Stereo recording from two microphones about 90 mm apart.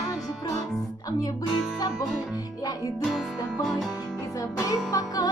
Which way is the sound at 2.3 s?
40° left (ahead or behind).